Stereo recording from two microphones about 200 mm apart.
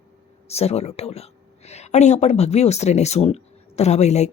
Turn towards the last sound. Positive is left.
turn(degrees=35)  # may be behind; listen again after turning